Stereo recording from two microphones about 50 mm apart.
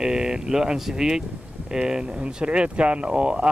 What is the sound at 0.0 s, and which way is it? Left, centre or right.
Speech, centre.